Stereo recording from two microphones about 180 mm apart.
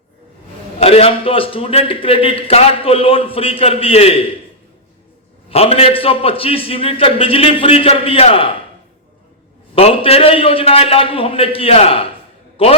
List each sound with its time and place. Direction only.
0.8 s a man's voice: 35° left (ahead or behind)
5.5 s a man's voice: 35° left (ahead or behind)
9.7 s a man's voice: 30° left (ahead or behind)